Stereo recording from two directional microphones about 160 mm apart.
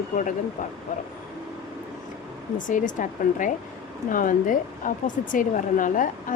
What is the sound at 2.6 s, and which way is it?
A woman's voice, 55° left (ahead or behind).